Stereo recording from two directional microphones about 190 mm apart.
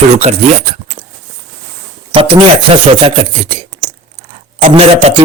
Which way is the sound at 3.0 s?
30° right (ahead or behind).